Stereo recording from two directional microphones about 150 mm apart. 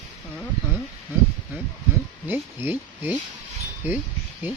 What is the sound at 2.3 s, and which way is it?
Speech, 15° right (ahead or behind).